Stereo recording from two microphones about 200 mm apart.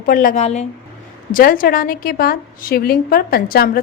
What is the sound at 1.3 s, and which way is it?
A woman's voice, 45° left (ahead or behind).